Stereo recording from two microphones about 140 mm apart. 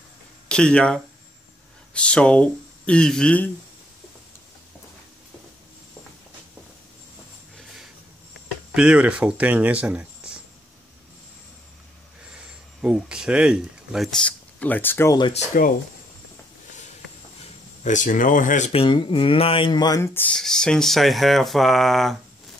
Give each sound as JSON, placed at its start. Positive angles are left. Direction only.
{"t": 0.5, "sound": "speech", "side_deg": 5}
{"t": 8.7, "sound": "speech", "side_deg": -10}
{"t": 12.4, "sound": "speech", "side_deg": -5}
{"t": 15.3, "sound": "speech", "side_deg": 70}
{"t": 17.4, "sound": "speech", "side_deg": 60}
{"t": 18.7, "sound": "speech", "side_deg": 40}
{"t": 20.0, "sound": "speech", "side_deg": 15}
{"t": 20.3, "sound": "speech", "side_deg": 5}